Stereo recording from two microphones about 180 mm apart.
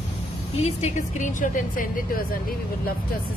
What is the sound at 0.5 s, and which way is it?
A woman's voice, 35° left (ahead or behind).